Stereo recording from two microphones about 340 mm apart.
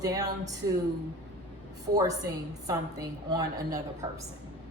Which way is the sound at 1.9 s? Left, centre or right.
Centre.